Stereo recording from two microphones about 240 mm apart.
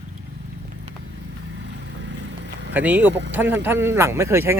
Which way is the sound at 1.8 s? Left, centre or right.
Right.